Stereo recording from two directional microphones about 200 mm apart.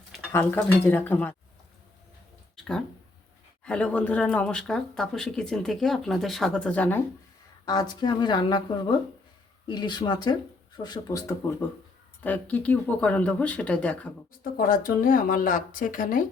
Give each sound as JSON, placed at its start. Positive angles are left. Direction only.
{"t": 0.3, "sound": "speech", "side_deg": 10}
{"t": 3.6, "sound": "speech", "side_deg": 5}
{"t": 7.6, "sound": "speech", "side_deg": 20}
{"t": 14.4, "sound": "speech", "side_deg": 45}